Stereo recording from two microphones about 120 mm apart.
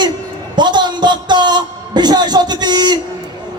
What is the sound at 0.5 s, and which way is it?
A man's voice, 40° right (ahead or behind).